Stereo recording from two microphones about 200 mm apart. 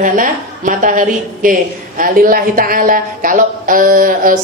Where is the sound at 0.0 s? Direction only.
40° right (ahead or behind).